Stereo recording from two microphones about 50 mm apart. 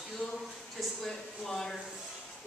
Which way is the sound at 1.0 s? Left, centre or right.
Centre.